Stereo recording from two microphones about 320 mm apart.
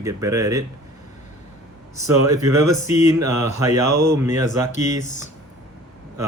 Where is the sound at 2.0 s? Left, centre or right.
Centre.